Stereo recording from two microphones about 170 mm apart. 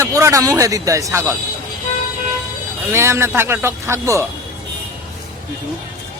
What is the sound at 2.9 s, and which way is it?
A man's voice, 15° right (ahead or behind).